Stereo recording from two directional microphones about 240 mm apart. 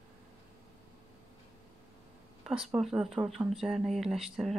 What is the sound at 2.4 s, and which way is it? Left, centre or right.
Speech, centre.